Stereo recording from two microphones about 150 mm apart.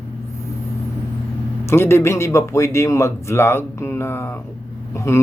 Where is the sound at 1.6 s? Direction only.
15° left (ahead or behind).